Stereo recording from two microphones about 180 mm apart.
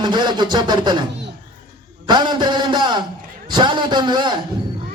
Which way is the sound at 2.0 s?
25° right (ahead or behind).